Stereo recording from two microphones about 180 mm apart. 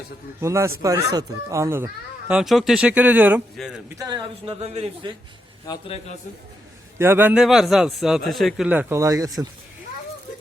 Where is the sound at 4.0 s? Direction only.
25° right (ahead or behind).